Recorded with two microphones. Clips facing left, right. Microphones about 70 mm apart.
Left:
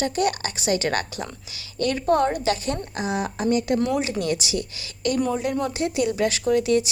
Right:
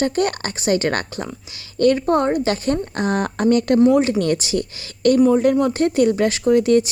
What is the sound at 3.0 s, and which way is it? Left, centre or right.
Speech, right.